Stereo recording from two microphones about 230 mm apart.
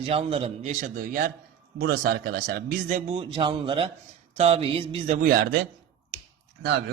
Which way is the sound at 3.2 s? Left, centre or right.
Right.